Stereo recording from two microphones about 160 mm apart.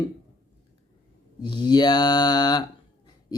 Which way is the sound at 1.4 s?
25° left (ahead or behind).